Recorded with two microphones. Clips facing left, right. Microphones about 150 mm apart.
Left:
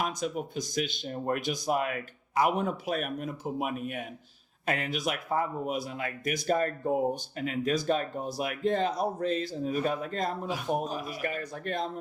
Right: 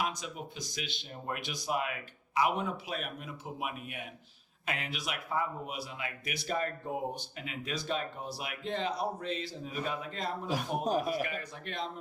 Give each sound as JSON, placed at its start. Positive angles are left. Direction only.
{"t": 0.0, "sound": "speech", "side_deg": 45}
{"t": 10.8, "sound": "a man's voice", "side_deg": -45}
{"t": 11.2, "sound": "speech", "side_deg": 45}